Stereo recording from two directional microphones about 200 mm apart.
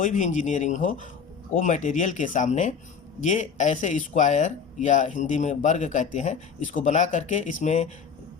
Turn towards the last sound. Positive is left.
turn(degrees=35)  # may be behind; listen again after turning